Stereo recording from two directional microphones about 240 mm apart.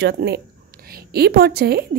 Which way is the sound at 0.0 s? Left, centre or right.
Right.